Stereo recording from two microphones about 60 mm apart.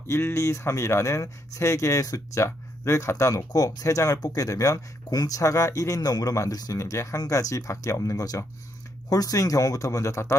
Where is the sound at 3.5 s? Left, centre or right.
Left.